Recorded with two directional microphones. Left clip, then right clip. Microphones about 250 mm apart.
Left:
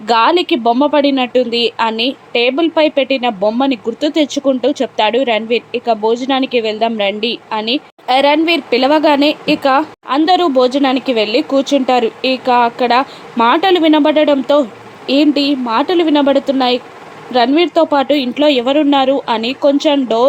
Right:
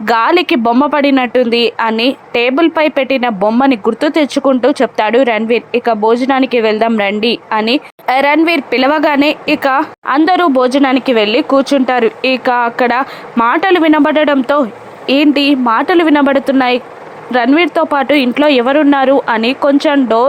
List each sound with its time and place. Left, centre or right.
0.0 s a woman's voice: centre